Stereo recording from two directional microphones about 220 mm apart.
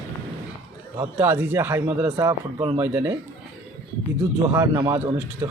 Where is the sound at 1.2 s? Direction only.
10° right (ahead or behind).